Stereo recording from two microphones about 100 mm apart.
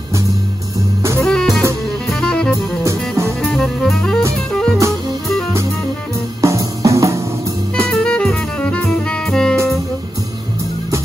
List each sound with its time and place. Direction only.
1.2 s music: 5° left (ahead or behind)
2.8 s music: 30° right (ahead or behind)
3.5 s music: centre (ahead or behind)
6.4 s music: 35° right (ahead or behind)
7.9 s music: 10° left (ahead or behind)